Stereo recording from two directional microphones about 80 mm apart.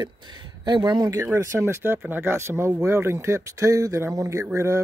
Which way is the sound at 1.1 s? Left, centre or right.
Right.